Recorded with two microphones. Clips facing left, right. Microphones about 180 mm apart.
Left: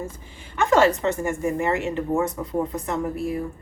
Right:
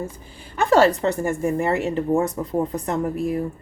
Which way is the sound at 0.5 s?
35° right (ahead or behind).